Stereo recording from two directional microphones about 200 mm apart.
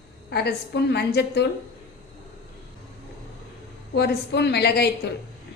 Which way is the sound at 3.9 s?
55° left (ahead or behind).